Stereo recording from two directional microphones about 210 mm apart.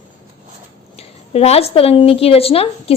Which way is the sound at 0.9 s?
30° left (ahead or behind).